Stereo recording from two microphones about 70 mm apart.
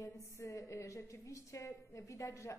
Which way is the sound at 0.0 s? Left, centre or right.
Left.